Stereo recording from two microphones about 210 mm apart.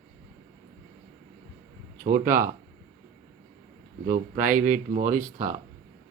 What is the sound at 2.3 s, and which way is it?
Speech, 40° right (ahead or behind).